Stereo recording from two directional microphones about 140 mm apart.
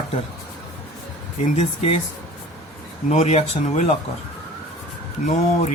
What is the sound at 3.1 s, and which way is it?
Speech, 50° left (ahead or behind).